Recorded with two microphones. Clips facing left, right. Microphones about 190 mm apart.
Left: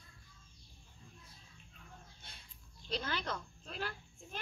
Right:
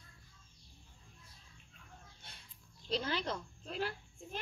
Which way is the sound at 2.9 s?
30° right (ahead or behind).